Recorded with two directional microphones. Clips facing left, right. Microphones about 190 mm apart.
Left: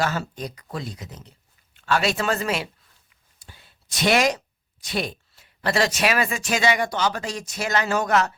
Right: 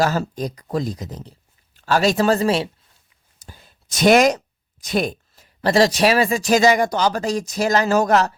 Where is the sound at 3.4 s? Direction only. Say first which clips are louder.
Right 5 dB; 40° right (ahead or behind).